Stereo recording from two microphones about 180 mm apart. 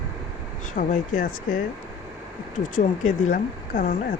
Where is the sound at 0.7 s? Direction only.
45° left (ahead or behind).